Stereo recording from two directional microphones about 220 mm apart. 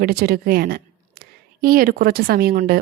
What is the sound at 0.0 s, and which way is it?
A woman's voice, 45° right (ahead or behind).